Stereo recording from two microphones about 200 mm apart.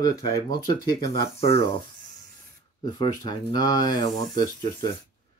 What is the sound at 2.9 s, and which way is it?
Speech, 20° left (ahead or behind).